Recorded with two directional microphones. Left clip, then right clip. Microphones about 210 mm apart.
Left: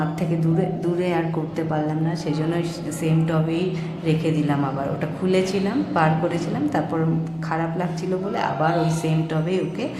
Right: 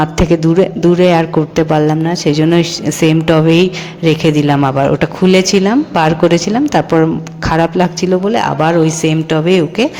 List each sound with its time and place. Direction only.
0.2 s a man's voice: 35° right (ahead or behind)